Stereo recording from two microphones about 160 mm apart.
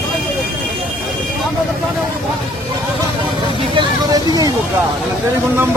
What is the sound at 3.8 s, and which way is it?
Vehicle, 25° right (ahead or behind).